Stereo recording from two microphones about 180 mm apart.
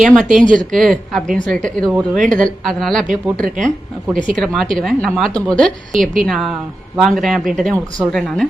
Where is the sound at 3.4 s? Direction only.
50° right (ahead or behind).